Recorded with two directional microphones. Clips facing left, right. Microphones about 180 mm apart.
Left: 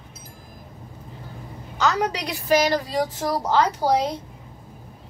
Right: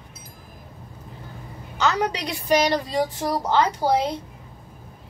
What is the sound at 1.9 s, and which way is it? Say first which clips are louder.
A child's voice: even; 5° left (ahead or behind).